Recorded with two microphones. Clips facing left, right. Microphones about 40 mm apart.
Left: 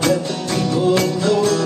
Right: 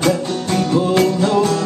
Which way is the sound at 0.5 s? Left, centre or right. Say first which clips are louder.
Right 3 dB; right.